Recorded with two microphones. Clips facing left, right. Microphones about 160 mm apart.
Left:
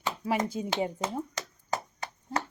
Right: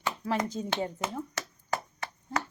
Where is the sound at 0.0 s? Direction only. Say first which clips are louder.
Left 1 dB; 15° left (ahead or behind).